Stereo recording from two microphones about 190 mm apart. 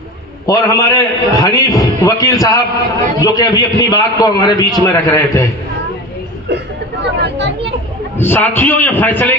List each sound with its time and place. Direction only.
0.4 s a man's voice: 20° left (ahead or behind)
7.0 s a sound: 65° right (ahead or behind)
8.2 s a man's voice: 10° left (ahead or behind)